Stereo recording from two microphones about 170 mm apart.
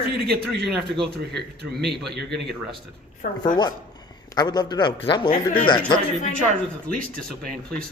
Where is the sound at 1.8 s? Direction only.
75° right (ahead or behind).